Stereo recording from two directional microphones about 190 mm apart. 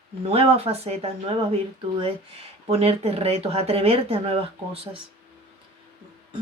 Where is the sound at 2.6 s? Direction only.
35° right (ahead or behind).